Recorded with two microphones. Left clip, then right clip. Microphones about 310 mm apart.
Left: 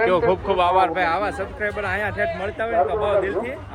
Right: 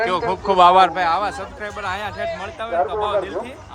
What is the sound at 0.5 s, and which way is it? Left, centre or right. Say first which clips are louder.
Speech: right 8 dB; right.